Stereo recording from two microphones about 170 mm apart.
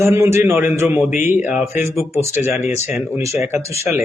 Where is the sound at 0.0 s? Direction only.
15° right (ahead or behind).